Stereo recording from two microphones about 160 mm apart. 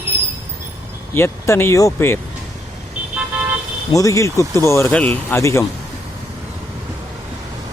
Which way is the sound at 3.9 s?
20° left (ahead or behind).